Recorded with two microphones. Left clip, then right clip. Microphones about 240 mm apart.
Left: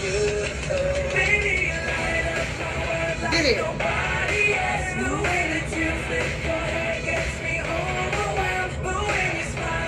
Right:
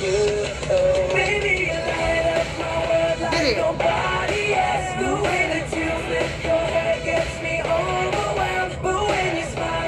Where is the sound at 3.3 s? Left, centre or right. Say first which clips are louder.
Right 1 dB; centre.